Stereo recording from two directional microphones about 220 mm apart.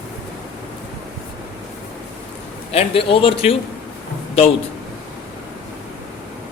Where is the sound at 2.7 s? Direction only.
25° left (ahead or behind).